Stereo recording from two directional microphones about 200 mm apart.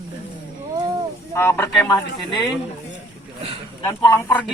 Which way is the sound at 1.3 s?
15° left (ahead or behind).